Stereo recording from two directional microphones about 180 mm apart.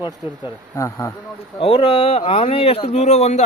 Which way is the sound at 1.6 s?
30° left (ahead or behind).